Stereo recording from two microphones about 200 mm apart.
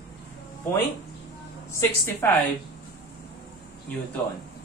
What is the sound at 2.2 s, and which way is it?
Speech, 10° left (ahead or behind).